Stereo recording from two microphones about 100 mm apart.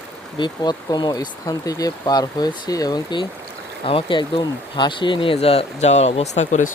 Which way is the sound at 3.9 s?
60° left (ahead or behind).